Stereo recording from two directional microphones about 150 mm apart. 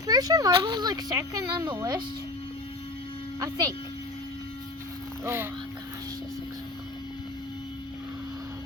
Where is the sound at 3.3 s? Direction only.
25° right (ahead or behind).